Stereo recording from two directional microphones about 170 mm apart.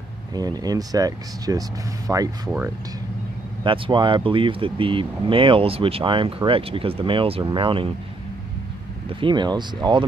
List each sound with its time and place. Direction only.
0.3 s speech: 20° right (ahead or behind)
3.6 s speech: 30° right (ahead or behind)
9.2 s speech: 25° right (ahead or behind)